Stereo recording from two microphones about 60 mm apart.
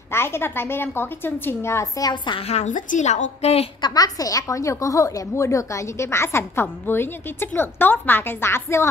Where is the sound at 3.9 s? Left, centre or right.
Left.